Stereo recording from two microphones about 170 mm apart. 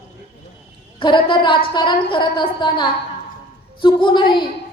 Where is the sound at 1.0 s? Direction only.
30° left (ahead or behind).